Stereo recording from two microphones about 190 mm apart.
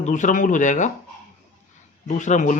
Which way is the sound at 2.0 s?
40° left (ahead or behind).